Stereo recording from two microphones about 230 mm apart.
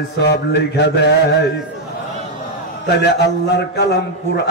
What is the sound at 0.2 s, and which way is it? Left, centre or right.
Mantra, left.